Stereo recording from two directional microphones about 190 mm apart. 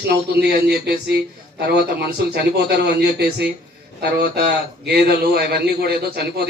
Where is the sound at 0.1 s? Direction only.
55° right (ahead or behind).